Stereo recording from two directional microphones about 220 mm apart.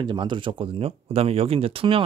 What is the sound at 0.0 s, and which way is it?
Speech, 20° right (ahead or behind).